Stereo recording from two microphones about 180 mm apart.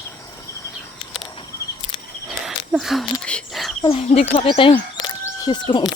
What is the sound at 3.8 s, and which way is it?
Speech, 35° left (ahead or behind).